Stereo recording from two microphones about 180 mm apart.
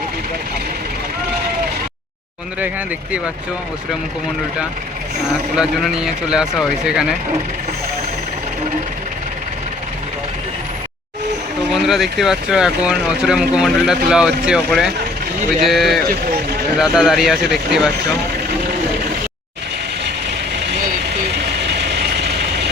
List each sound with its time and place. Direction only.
5.5 s speech: 5° right (ahead or behind)
11.7 s speech: centre (ahead or behind)
21.3 s vehicle: 65° right (ahead or behind)